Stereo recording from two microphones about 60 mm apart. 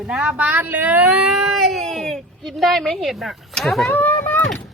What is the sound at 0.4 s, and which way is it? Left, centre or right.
Speech, right.